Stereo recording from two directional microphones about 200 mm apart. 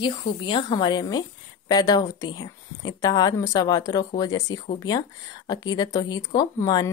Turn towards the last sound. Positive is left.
turn(degrees=20)  # may be behind; listen again after turning